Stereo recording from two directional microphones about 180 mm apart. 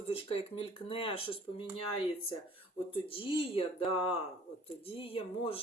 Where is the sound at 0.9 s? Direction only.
30° left (ahead or behind).